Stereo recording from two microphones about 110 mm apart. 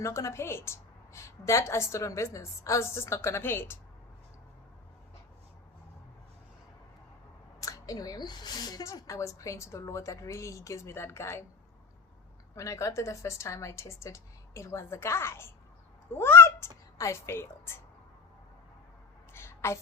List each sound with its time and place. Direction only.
0.0 s a woman's voice: 25° left (ahead or behind)
7.6 s a woman's voice: 30° left (ahead or behind)
12.5 s a woman's voice: 30° left (ahead or behind)
19.3 s a sound: 20° left (ahead or behind)